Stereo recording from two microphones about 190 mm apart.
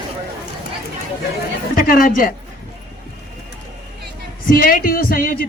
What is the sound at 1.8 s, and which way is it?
Speech, 50° left (ahead or behind).